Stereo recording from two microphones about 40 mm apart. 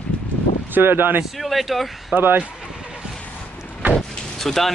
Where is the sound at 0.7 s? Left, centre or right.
Right.